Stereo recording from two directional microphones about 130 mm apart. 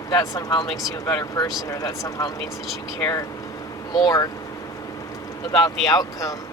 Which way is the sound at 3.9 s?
30° left (ahead or behind).